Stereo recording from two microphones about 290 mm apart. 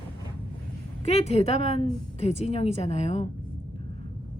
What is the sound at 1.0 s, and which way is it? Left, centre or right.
A woman's voice, left.